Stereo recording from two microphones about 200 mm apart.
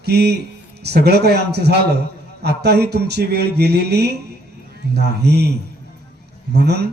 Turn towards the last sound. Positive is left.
turn(degrees=-55)  # may be behind; listen again after turning